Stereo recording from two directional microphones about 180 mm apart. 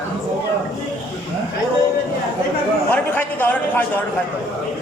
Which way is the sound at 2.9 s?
10° left (ahead or behind).